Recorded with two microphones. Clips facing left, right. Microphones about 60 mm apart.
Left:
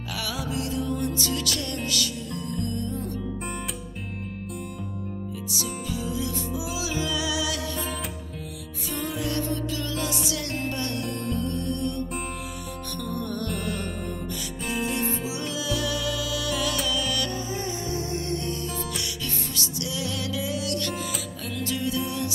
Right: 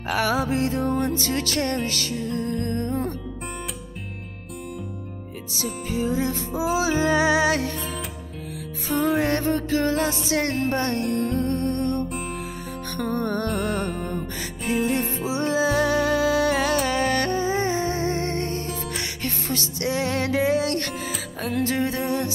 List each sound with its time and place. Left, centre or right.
0.1 s music: right
5.6 s music: right
8.8 s music: right
14.7 s music: right